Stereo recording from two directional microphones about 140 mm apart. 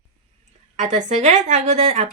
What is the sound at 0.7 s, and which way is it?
A woman's voice, 60° right (ahead or behind).